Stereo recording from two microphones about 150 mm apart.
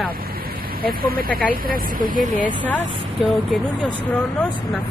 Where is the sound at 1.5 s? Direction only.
70° right (ahead or behind).